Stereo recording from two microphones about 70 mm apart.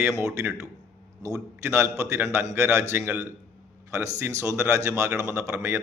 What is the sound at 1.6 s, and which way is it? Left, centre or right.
A man's voice, right.